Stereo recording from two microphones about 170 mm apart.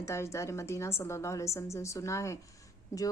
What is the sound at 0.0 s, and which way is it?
A woman's voice, 15° left (ahead or behind).